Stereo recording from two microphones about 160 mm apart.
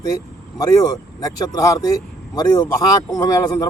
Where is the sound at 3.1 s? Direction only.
25° left (ahead or behind).